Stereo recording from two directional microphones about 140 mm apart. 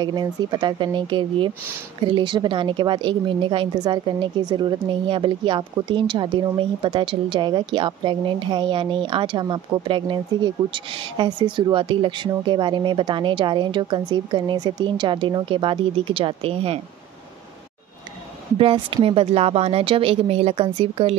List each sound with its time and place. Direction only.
0.0 s a woman's voice: 30° right (ahead or behind)
18.6 s a woman's voice: 40° right (ahead or behind)